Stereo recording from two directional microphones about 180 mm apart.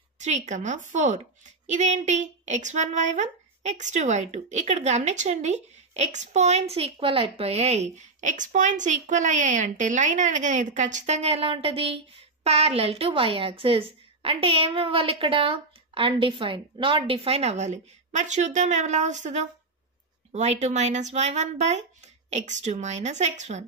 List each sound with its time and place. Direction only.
0.2 s a woman's voice: 40° right (ahead or behind)